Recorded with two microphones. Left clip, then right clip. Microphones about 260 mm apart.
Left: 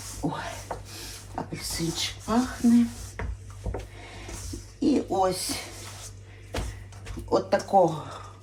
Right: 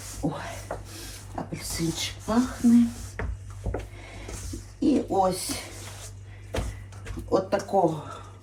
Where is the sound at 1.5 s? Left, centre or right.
Centre.